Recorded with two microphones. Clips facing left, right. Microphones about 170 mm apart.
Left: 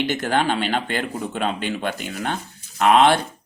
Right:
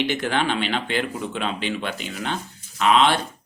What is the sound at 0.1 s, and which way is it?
Speech, 45° left (ahead or behind).